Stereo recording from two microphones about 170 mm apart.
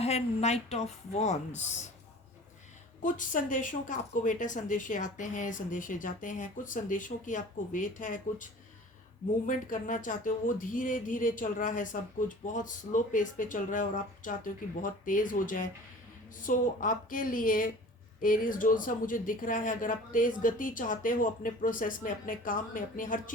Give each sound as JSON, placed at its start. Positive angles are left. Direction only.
{"t": 0.0, "sound": "speech", "side_deg": 40}
{"t": 3.0, "sound": "speech", "side_deg": 50}
{"t": 9.5, "sound": "speech", "side_deg": 50}